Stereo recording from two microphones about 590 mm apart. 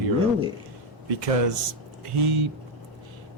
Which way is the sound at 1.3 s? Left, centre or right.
Right.